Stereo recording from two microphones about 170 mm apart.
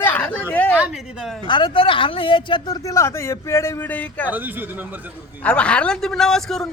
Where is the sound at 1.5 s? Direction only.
30° left (ahead or behind); by 4.3 s 10° left (ahead or behind).